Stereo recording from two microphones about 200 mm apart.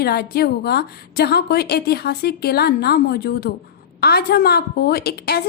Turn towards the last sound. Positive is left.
turn(degrees=50)  # may be behind; listen again after turning